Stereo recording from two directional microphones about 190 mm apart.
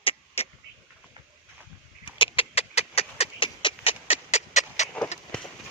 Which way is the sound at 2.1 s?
25° left (ahead or behind).